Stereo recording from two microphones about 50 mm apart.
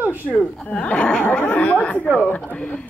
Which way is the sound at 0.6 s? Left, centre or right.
Left.